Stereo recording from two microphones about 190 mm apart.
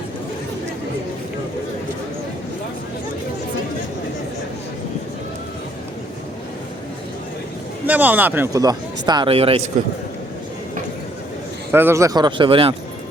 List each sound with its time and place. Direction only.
7.9 s speech: 10° right (ahead or behind); by 9.6 s 30° right (ahead or behind)
11.7 s speech: 10° right (ahead or behind); by 12.7 s 30° right (ahead or behind)